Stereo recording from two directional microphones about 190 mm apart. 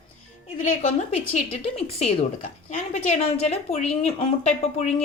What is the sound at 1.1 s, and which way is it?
A woman's voice, 30° left (ahead or behind).